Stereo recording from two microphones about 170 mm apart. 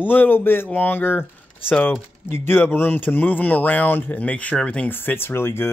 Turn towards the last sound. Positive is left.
turn(degrees=15)  # may be behind; listen again after turning